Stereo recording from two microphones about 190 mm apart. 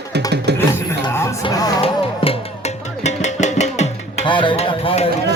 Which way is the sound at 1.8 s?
30° left (ahead or behind).